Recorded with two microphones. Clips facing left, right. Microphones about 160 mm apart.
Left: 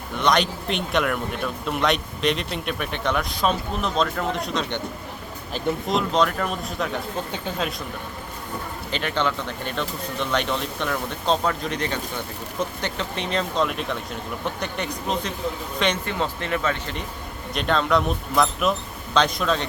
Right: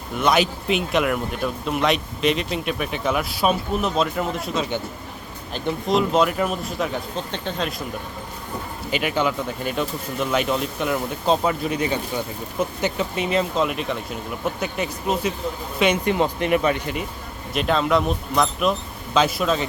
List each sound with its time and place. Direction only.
0.2 s speech: 5° right (ahead or behind)
8.9 s speech: 10° right (ahead or behind)